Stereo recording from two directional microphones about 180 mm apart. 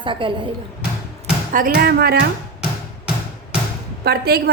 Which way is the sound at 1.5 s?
55° right (ahead or behind).